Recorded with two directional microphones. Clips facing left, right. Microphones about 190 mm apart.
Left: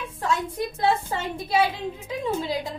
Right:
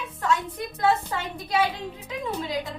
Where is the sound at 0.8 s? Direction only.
30° left (ahead or behind).